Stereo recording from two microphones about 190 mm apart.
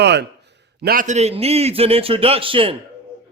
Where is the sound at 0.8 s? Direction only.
50° right (ahead or behind).